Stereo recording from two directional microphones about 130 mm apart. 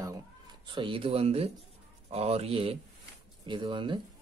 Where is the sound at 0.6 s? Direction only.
40° right (ahead or behind).